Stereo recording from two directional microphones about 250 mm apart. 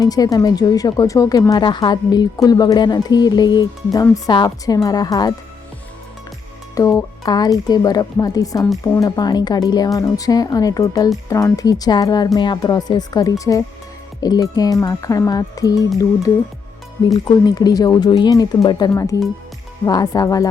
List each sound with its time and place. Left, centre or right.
0.0 s speech: centre
6.7 s speech: centre
17.1 s speech: centre